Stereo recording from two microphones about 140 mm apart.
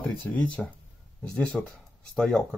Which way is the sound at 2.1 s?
5° left (ahead or behind).